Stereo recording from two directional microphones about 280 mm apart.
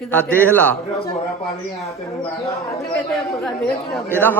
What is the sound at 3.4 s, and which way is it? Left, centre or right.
Speech, centre.